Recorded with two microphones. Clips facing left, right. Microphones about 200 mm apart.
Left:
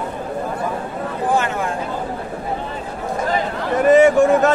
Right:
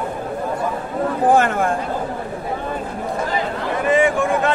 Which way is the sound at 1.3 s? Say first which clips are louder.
Right 4 dB; 55° right (ahead or behind).